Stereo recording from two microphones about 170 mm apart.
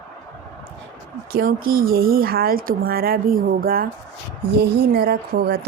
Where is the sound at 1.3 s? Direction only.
60° right (ahead or behind).